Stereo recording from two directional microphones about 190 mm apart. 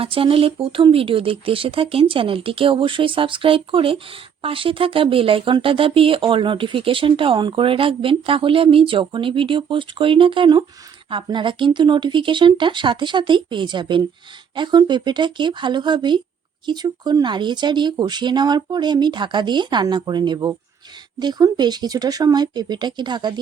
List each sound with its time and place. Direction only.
0.0 s speech: 30° right (ahead or behind)